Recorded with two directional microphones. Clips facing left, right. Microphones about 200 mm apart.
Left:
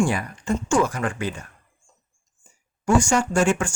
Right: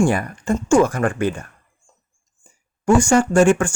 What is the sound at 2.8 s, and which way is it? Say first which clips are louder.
Speech: right 5 dB; 55° right (ahead or behind).